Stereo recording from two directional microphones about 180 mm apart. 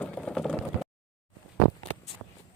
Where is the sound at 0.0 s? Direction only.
5° left (ahead or behind).